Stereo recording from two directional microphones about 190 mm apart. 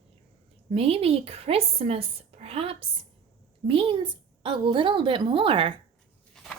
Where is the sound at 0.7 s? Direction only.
30° right (ahead or behind).